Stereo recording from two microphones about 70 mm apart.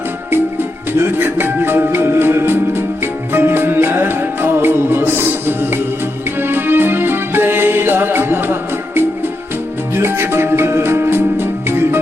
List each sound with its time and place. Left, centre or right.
0.9 s music: right
9.9 s music: right